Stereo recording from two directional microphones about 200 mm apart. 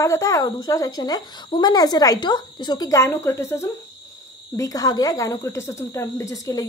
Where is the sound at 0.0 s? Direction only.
15° left (ahead or behind).